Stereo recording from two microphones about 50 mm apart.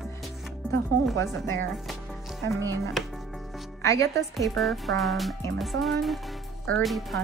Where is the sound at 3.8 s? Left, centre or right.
Left.